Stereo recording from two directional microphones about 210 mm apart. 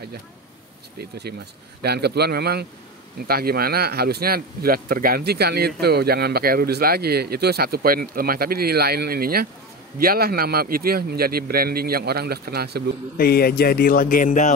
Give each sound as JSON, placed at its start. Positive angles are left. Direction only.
{"t": 0.9, "sound": "speech", "side_deg": -50}
{"t": 13.2, "sound": "speech", "side_deg": 45}